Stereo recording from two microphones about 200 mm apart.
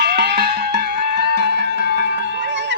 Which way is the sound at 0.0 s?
55° right (ahead or behind).